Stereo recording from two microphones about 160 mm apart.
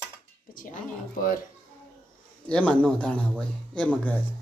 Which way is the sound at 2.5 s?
5° left (ahead or behind).